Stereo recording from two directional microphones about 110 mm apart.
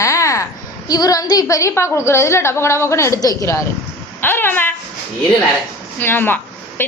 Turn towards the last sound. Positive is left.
turn(degrees=20)  # may be behind; listen again after turning